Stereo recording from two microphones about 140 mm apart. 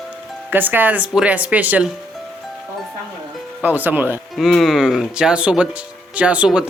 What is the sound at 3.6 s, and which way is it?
Speech, 10° right (ahead or behind).